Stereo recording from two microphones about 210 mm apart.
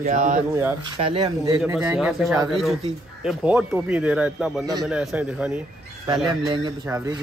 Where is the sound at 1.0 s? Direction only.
25° right (ahead or behind).